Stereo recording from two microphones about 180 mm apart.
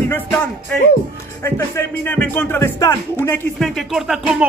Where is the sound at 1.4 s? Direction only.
15° left (ahead or behind).